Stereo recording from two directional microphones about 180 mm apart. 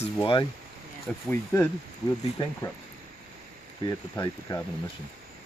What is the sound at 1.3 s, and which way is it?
Speech, 10° left (ahead or behind).